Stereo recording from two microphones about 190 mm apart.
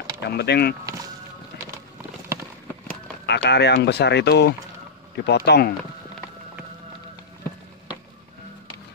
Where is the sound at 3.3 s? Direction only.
65° left (ahead or behind).